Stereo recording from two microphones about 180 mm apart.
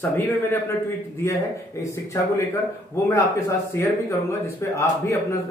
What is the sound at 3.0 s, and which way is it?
A man's voice, 15° left (ahead or behind).